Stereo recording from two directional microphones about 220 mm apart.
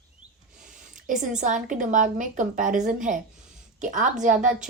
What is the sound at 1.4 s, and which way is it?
A woman's voice, 35° right (ahead or behind).